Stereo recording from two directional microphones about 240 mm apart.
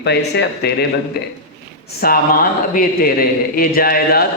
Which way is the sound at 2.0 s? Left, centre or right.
Left.